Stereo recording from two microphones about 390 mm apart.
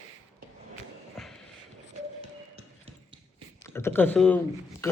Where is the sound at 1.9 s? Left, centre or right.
Centre.